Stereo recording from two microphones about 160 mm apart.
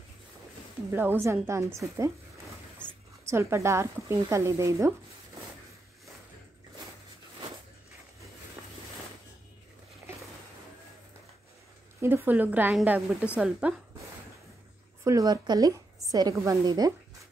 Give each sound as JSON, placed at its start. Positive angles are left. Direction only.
{"t": 0.9, "sound": "speech", "side_deg": -15}
{"t": 3.3, "sound": "speech", "side_deg": -15}
{"t": 12.0, "sound": "speech", "side_deg": -15}
{"t": 15.0, "sound": "a woman's voice", "side_deg": -20}